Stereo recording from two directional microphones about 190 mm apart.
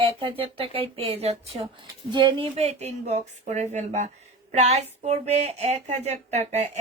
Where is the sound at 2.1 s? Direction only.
25° right (ahead or behind).